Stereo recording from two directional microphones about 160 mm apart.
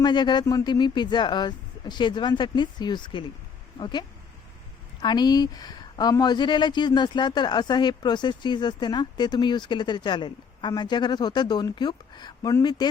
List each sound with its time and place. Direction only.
0.0 s speech: 30° left (ahead or behind)
5.0 s speech: 25° left (ahead or behind)